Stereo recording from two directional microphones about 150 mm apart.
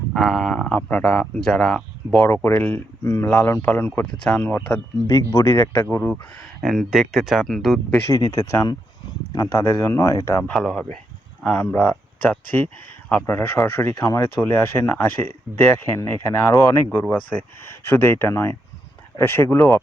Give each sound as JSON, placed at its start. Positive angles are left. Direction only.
{"t": 0.1, "sound": "speech", "side_deg": 0}
{"t": 6.6, "sound": "speech", "side_deg": 0}
{"t": 7.9, "sound": "speech", "side_deg": 20}